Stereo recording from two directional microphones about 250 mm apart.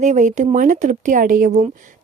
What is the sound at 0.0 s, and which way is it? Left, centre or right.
A woman's voice, right.